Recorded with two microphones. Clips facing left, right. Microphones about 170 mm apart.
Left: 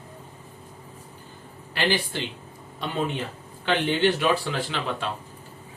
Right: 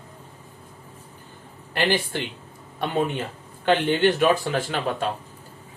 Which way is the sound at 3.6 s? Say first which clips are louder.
Right 3 dB; 50° right (ahead or behind).